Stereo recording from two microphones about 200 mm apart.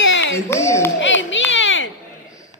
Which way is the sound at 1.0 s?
70° left (ahead or behind).